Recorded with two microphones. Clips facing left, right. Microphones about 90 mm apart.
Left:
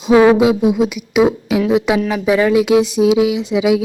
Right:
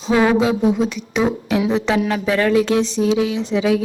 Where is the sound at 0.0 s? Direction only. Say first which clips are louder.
Left 6 dB; 15° left (ahead or behind).